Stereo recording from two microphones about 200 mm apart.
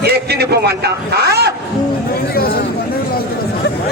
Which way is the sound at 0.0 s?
55° right (ahead or behind).